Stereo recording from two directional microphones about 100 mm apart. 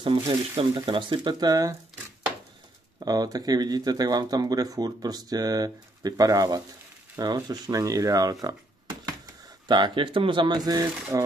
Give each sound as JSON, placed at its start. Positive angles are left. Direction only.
{"t": 0.0, "sound": "speech", "side_deg": -55}
{"t": 3.0, "sound": "speech", "side_deg": -40}